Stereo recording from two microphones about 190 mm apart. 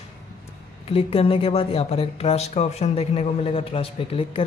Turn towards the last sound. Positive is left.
turn(degrees=30)  # may be behind; listen again after turning